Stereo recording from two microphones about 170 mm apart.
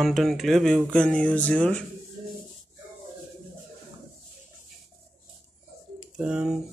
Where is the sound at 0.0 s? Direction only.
Centre (ahead or behind).